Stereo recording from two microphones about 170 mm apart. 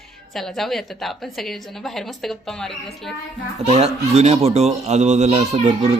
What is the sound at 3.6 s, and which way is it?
Speech, 35° right (ahead or behind).